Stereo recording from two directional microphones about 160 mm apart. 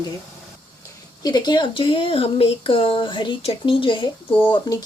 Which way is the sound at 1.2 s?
25° left (ahead or behind).